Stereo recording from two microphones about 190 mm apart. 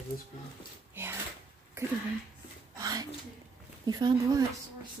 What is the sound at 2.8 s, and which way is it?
Speech, 20° right (ahead or behind).